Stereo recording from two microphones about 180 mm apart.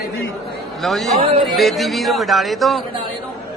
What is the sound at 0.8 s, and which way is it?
Speech, centre (ahead or behind).